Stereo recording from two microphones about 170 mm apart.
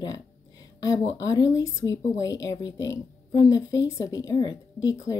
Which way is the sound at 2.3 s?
90° left.